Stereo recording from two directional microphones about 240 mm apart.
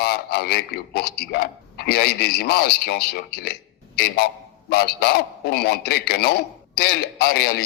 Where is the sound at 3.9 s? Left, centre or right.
Left.